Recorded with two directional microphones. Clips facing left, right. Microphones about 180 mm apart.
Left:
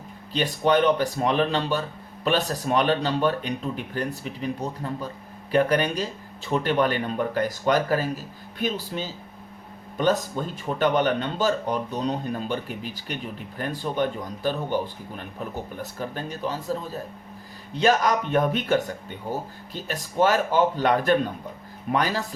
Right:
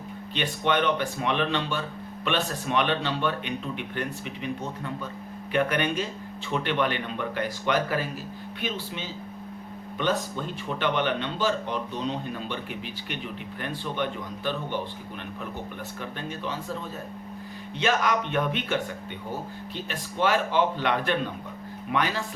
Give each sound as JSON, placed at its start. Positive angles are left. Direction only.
{"t": 0.3, "sound": "a man's voice", "side_deg": 40}